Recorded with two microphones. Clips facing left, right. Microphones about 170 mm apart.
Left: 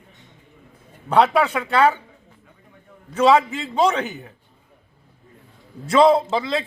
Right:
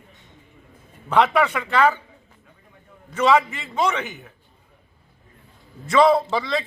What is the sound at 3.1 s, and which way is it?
A man's voice, 30° left (ahead or behind).